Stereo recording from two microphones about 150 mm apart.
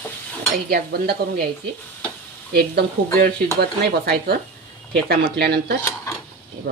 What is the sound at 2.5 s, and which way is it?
Speech, 90° right.